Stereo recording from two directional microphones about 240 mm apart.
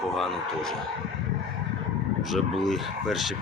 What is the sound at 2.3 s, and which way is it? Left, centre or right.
Speech, centre.